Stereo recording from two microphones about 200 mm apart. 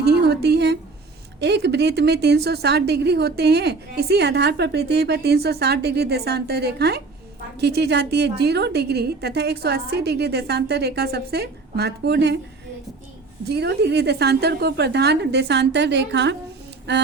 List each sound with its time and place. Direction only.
0.0 s a woman's voice: 55° right (ahead or behind)
13.5 s a woman's voice: 55° right (ahead or behind)